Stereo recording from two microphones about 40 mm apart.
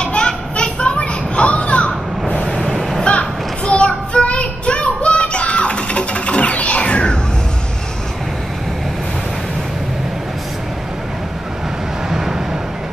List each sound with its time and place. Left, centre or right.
0.0 s a sound: left
0.6 s children playing: left
3.0 s child singing: left